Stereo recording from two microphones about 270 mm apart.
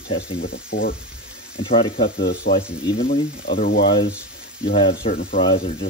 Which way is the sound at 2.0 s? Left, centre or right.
Left.